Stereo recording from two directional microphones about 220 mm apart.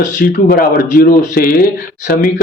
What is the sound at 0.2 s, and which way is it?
Speech, 40° left (ahead or behind).